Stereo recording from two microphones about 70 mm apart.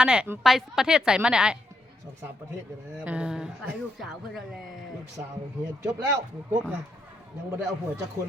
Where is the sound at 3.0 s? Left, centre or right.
Centre.